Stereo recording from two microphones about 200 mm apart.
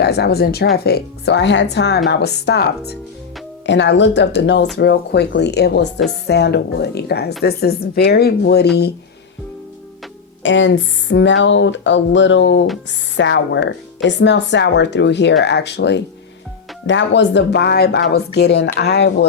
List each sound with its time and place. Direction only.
0.0 s a woman's voice: 55° left (ahead or behind)
10.4 s speech: 70° left (ahead or behind)